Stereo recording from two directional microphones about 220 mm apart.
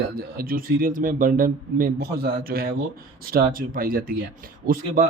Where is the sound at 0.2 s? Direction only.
40° right (ahead or behind).